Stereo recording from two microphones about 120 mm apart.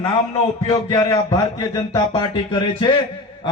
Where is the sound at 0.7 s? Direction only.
35° left (ahead or behind).